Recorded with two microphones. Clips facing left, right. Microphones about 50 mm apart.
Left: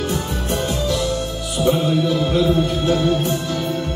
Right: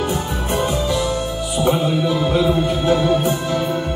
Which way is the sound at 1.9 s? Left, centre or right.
Centre.